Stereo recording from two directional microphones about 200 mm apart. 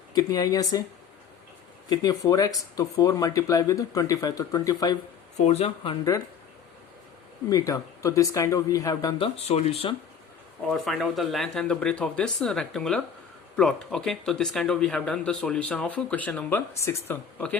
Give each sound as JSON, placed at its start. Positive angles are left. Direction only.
{"t": 0.1, "sound": "speech", "side_deg": 20}
{"t": 1.9, "sound": "speech", "side_deg": 20}
{"t": 5.5, "sound": "speech", "side_deg": 30}
{"t": 7.5, "sound": "speech", "side_deg": 15}
{"t": 10.7, "sound": "speech", "side_deg": 0}